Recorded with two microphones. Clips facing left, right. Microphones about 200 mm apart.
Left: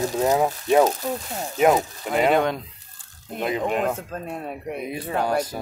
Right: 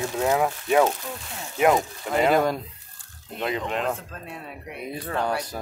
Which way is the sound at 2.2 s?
Centre (ahead or behind).